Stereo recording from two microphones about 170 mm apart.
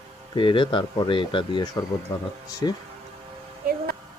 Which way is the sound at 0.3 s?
30° left (ahead or behind).